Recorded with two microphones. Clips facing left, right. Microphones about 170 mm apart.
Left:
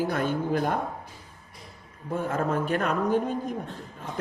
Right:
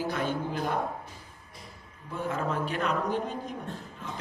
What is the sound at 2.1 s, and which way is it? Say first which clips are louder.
Speech: left 4 dB; 50° left (ahead or behind).